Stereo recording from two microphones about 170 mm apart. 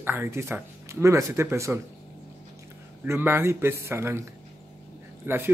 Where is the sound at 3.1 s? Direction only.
15° right (ahead or behind).